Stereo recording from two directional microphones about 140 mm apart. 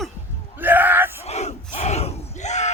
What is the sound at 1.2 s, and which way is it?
Battle cry, 50° left (ahead or behind).